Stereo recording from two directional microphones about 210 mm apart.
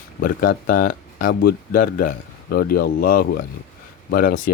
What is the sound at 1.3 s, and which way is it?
Speech, 50° left (ahead or behind).